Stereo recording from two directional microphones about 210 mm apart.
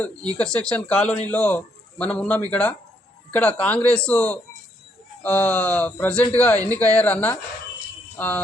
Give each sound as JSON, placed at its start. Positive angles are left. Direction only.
{"t": 0.3, "sound": "a man's voice", "side_deg": 5}